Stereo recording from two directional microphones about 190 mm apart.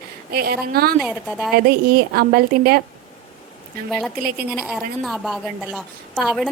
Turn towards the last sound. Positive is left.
turn(degrees=0)  # may be behind; listen again after turning